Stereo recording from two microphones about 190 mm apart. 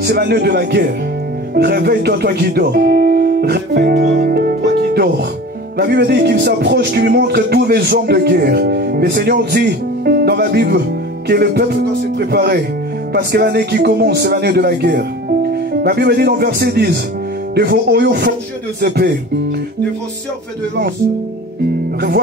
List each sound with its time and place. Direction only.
0.0 s speech: 60° right (ahead or behind)